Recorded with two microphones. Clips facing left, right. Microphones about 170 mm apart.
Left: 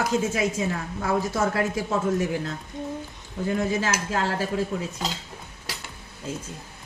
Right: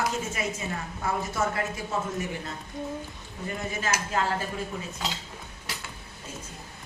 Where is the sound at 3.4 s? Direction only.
90° left.